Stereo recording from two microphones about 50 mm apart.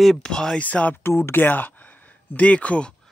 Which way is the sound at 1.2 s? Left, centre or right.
Left.